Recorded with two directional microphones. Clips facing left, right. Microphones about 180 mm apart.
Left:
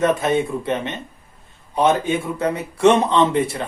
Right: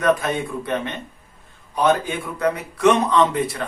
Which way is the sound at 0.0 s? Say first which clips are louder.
Left 2 dB; 25° left (ahead or behind).